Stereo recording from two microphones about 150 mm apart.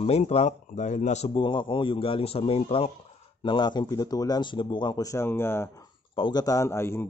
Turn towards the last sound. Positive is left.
turn(degrees=15)  # may be behind; listen again after turning